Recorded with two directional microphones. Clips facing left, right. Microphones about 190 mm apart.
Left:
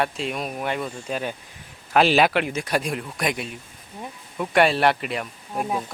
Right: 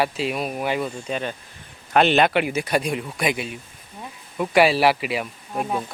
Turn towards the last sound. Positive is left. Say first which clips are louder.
# right 1 dB
turn(degrees=0)  # may be behind; listen again after turning